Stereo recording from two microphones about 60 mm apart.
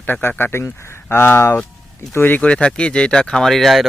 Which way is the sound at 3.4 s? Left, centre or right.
Centre.